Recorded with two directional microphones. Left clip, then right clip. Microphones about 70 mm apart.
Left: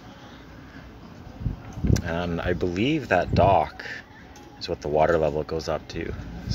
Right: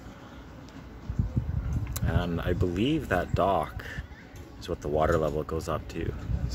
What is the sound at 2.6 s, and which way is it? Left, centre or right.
Speech, centre.